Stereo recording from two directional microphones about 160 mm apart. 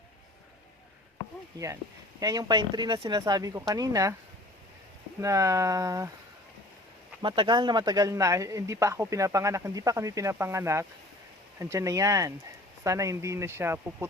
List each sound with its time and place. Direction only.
1.5 s speech: 20° right (ahead or behind)
5.2 s speech: 20° right (ahead or behind)
7.2 s speech: 30° right (ahead or behind); by 14.1 s 15° right (ahead or behind)